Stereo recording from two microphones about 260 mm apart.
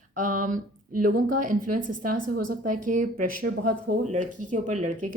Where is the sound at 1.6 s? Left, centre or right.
Right.